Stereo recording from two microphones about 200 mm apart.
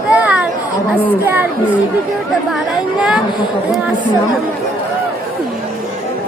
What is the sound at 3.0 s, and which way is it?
Speech, 5° right (ahead or behind).